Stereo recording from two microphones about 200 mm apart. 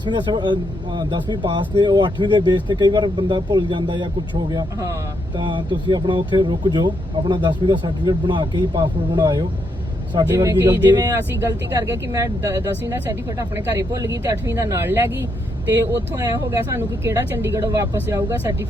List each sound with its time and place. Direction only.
0.0 s speech: 20° right (ahead or behind)
5.4 s speech: 25° right (ahead or behind)